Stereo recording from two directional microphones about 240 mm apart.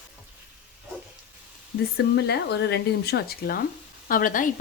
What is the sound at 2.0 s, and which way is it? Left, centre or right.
A woman's voice, left.